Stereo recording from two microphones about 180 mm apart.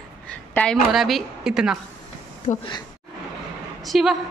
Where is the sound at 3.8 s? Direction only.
Centre (ahead or behind).